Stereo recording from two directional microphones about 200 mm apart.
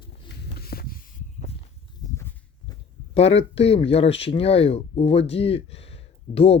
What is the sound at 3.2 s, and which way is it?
Speech, 30° left (ahead or behind).